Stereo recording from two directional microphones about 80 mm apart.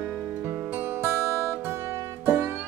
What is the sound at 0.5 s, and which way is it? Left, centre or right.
Music, right.